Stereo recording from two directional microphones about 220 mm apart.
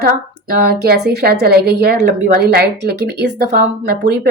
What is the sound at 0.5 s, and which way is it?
A woman's voice, 45° right (ahead or behind).